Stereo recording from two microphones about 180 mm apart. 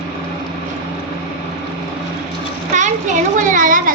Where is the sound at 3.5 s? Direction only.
50° right (ahead or behind).